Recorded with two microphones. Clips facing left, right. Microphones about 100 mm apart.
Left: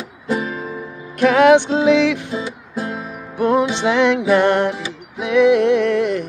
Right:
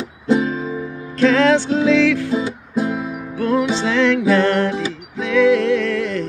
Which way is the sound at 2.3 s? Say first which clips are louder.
Right 5 dB; 20° right (ahead or behind).